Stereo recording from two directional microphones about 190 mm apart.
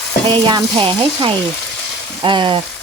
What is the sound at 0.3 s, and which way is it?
Frying, 25° right (ahead or behind).